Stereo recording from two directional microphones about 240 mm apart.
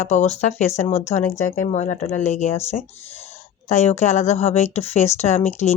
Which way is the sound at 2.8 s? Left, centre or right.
Centre.